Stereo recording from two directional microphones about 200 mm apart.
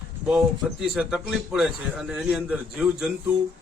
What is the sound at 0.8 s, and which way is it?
Speech, centre (ahead or behind).